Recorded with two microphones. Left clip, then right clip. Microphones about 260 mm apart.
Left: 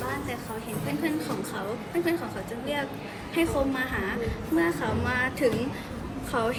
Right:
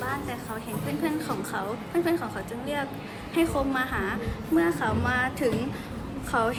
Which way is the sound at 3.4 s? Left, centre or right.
Centre.